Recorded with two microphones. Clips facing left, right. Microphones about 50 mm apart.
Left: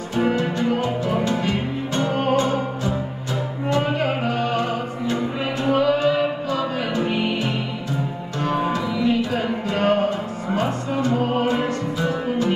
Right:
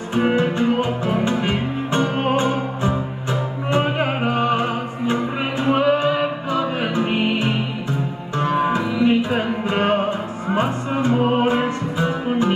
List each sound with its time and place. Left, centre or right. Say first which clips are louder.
0.1 s music: right 3 dB; right